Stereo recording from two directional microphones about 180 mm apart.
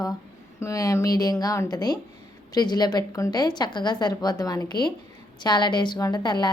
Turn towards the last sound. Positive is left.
turn(degrees=25)  # may be behind; listen again after turning